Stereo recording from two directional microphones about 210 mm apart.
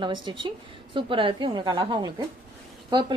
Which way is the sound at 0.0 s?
20° right (ahead or behind).